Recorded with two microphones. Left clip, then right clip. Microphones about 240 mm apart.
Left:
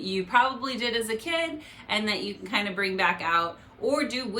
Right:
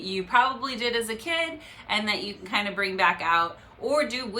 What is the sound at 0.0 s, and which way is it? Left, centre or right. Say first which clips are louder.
Speech: right 1 dB; centre.